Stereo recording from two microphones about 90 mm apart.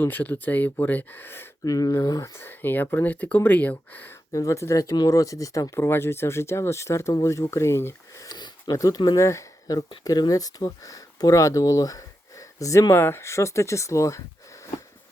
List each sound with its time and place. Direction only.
0.0 s speech: 20° left (ahead or behind)
1.6 s speech: 40° left (ahead or behind); by 4.1 s 20° left (ahead or behind)
4.3 s speech: 35° left (ahead or behind)
8.3 s sniff: 55° left (ahead or behind)
8.7 s speech: 40° left (ahead or behind)